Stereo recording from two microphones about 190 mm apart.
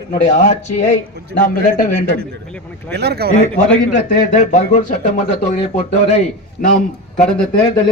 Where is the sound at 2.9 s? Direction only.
60° right (ahead or behind).